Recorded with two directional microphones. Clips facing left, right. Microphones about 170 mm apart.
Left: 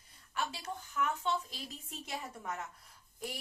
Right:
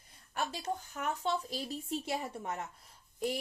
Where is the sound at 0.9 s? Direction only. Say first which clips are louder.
Left 2 dB; 40° right (ahead or behind).